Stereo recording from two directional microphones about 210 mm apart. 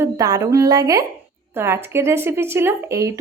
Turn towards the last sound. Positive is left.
turn(degrees=-15)  # may be behind; listen again after turning